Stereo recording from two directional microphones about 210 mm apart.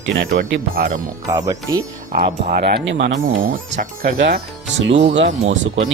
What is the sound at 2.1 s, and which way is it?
Speech, 40° right (ahead or behind).